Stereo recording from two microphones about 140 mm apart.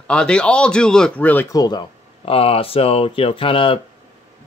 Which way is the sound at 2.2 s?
45° left (ahead or behind).